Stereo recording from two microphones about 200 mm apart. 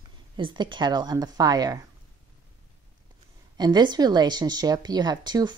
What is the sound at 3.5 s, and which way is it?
Speech, 20° right (ahead or behind).